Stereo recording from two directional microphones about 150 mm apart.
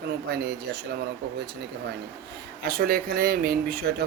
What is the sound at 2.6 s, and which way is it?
Speech, 80° right.